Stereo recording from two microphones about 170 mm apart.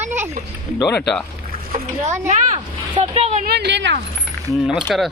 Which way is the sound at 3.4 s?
75° right (ahead or behind).